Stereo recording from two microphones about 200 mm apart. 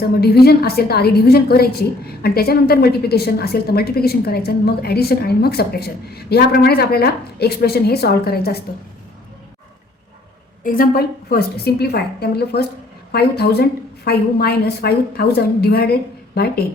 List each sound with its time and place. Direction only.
0.2 s a woman's voice: 50° left (ahead or behind)
10.6 s a woman's voice: 45° left (ahead or behind)